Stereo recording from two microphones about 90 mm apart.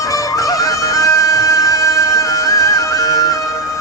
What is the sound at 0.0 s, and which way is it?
Music, 40° left (ahead or behind).